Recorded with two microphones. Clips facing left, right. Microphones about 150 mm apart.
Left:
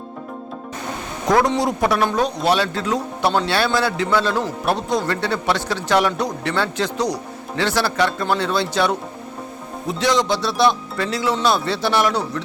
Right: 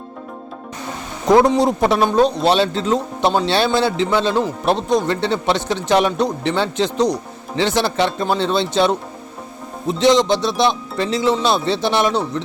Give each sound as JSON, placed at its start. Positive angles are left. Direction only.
{"t": 1.5, "sound": "a man's voice", "side_deg": -25}